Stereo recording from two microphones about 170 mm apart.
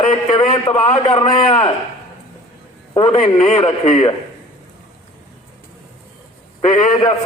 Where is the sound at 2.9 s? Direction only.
30° left (ahead or behind).